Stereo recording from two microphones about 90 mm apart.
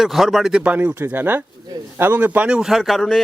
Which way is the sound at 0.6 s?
20° right (ahead or behind).